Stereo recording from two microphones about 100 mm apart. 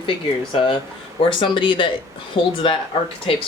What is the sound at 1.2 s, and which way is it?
Speech, 55° left (ahead or behind).